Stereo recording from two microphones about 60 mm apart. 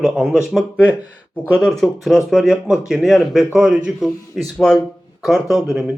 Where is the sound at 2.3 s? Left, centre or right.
Centre.